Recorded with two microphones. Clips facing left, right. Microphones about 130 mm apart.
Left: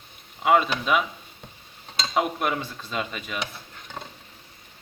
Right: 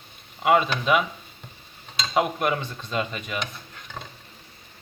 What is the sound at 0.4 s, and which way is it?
Speech, centre (ahead or behind).